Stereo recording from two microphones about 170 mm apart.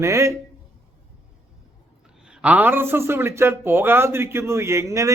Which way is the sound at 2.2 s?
5° right (ahead or behind).